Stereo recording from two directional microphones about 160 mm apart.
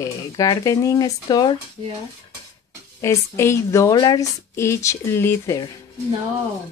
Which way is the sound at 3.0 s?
15° left (ahead or behind).